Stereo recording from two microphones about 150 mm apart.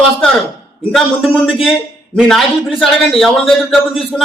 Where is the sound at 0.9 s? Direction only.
Centre (ahead or behind).